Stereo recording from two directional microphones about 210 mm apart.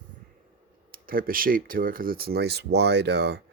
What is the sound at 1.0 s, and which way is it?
Speech, 40° right (ahead or behind).